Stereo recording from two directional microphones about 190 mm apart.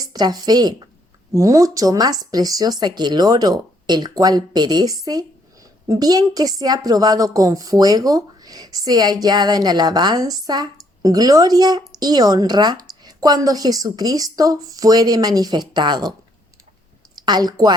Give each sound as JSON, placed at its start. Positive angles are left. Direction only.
{"t": 0.0, "sound": "a woman's voice", "side_deg": -20}
{"t": 17.2, "sound": "speech", "side_deg": -20}